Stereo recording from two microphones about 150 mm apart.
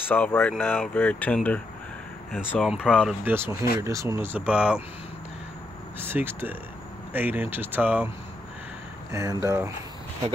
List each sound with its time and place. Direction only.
0.1 s speech: 10° left (ahead or behind)
2.6 s speech: 5° right (ahead or behind)
3.3 s speech: 15° right (ahead or behind)
5.9 s speech: 15° right (ahead or behind)
9.1 s speech: 20° right (ahead or behind)